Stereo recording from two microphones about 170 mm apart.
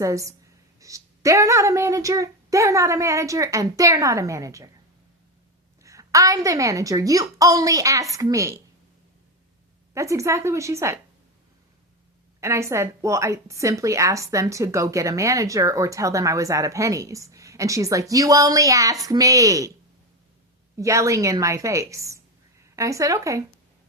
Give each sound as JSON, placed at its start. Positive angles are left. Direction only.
{"t": 0.0, "sound": "a woman's voice", "side_deg": -20}
{"t": 5.8, "sound": "a woman's voice", "side_deg": -20}
{"t": 9.9, "sound": "a woman's voice", "side_deg": -15}
{"t": 12.4, "sound": "a woman's voice", "side_deg": -15}
{"t": 20.7, "sound": "a woman's voice", "side_deg": -20}